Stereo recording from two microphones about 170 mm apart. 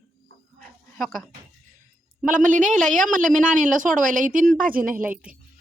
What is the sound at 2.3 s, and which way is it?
Speech, 50° right (ahead or behind).